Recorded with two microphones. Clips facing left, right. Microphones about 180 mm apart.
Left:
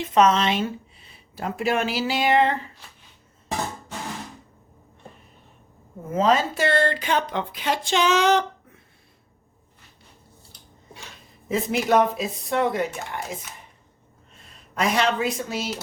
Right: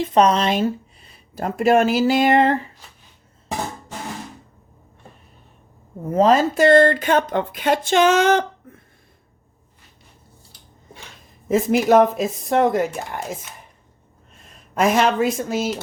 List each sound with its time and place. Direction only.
0.0 s speech: 35° right (ahead or behind)
6.1 s speech: 40° right (ahead or behind)
11.9 s speech: 45° right (ahead or behind)
14.8 s speech: 45° right (ahead or behind)